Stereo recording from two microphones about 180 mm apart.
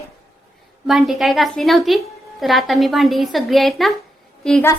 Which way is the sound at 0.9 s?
Centre (ahead or behind).